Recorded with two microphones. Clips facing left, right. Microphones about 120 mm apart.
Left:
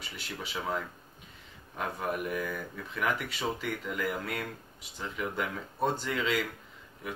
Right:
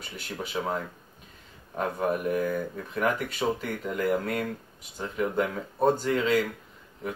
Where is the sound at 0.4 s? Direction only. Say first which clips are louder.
Right 4 dB; 40° right (ahead or behind).